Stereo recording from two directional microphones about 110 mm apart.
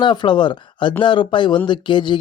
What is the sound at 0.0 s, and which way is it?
Speech, 45° left (ahead or behind).